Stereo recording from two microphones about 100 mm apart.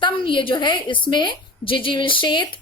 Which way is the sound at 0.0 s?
55° left (ahead or behind).